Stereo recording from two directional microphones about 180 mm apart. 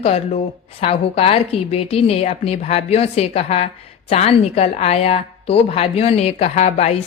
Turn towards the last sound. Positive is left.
turn(degrees=35)  # may be behind; listen again after turning